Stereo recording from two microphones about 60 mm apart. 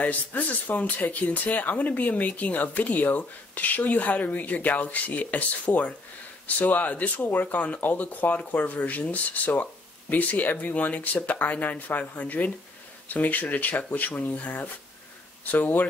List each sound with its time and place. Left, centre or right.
0.0 s speech: left